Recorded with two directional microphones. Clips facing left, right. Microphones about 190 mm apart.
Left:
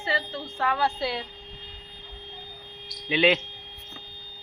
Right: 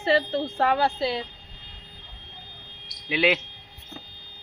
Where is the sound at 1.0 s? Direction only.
20° right (ahead or behind).